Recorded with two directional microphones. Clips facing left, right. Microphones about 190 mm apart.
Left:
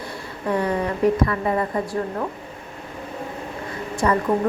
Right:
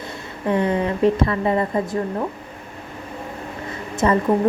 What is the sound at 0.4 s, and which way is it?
A woman's voice, 25° right (ahead or behind).